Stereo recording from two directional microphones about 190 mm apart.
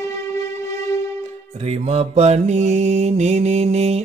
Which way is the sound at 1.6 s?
35° right (ahead or behind).